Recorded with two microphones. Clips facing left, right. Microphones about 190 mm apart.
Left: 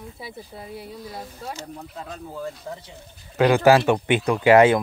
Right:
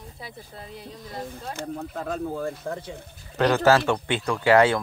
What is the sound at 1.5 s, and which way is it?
Speech, 55° right (ahead or behind).